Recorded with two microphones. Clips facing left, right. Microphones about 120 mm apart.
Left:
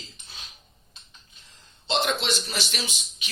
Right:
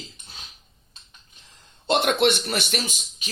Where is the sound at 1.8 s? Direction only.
55° right (ahead or behind).